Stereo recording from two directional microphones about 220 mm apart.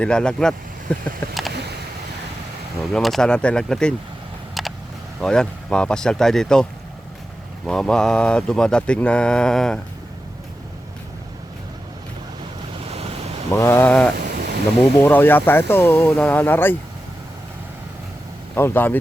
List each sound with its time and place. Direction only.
0.0 s speech: 5° left (ahead or behind)
1.5 s a sound: 50° right (ahead or behind)
2.9 s speech: centre (ahead or behind)
4.6 s a sound: centre (ahead or behind)
5.2 s speech: 5° left (ahead or behind)
12.8 s waves: 25° right (ahead or behind)
13.5 s speech: 10° left (ahead or behind)
14.2 s a sound: 50° right (ahead or behind)
15.0 s speech: 10° left (ahead or behind)
18.5 s speech: 10° left (ahead or behind)